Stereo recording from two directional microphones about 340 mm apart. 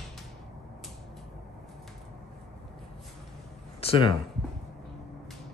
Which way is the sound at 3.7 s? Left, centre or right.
Centre.